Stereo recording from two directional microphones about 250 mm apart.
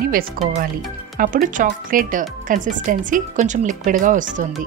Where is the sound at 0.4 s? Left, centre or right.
Right.